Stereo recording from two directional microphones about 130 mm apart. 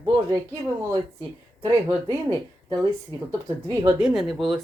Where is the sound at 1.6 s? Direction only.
30° right (ahead or behind).